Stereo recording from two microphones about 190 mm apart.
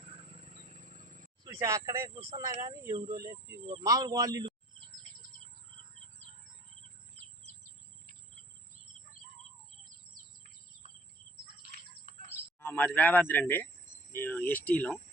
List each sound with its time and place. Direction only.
0.0 s wild animals: 30° right (ahead or behind)
1.5 s speech: 15° right (ahead or behind)
11.7 s bird: 40° right (ahead or behind)
12.5 s speech: 10° left (ahead or behind)